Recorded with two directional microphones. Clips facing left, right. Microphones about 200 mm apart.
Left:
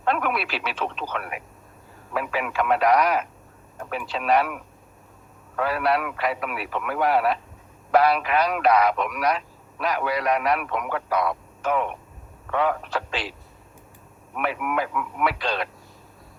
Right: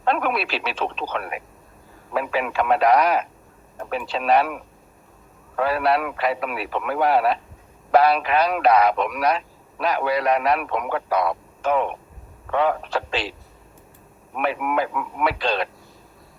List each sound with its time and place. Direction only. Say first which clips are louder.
0.0 s speech: right 2 dB; 30° right (ahead or behind)
14.3 s speech: right 3 dB; 30° right (ahead or behind)